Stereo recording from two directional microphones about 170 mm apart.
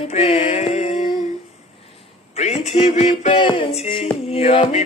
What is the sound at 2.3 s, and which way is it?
Music, 40° left (ahead or behind).